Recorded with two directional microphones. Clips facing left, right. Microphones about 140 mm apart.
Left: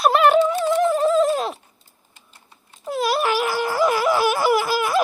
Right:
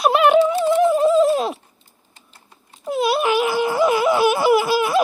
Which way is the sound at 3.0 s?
Centre (ahead or behind).